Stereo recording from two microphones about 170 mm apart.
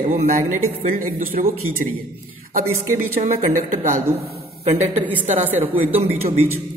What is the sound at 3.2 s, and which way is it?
Speech, 45° right (ahead or behind).